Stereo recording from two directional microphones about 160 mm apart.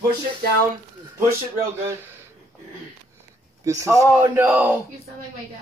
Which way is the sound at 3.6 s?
20° right (ahead or behind).